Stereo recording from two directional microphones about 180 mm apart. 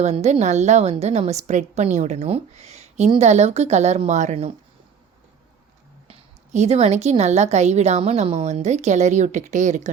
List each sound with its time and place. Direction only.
0.0 s a woman's voice: 40° right (ahead or behind)
6.1 s a woman's voice: 40° right (ahead or behind)